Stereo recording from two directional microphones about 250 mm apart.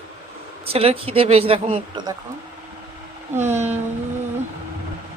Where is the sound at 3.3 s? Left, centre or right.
Centre.